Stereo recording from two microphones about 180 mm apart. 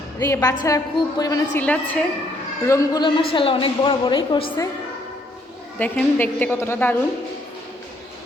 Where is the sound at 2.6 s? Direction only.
20° left (ahead or behind).